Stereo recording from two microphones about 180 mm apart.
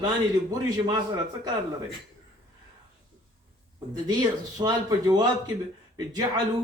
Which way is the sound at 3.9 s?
20° right (ahead or behind).